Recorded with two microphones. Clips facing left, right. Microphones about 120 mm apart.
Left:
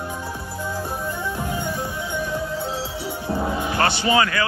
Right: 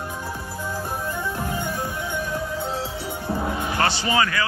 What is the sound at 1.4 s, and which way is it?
Music, 15° left (ahead or behind).